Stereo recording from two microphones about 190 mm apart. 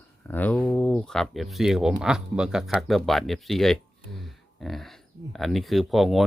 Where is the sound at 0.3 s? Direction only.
10° left (ahead or behind).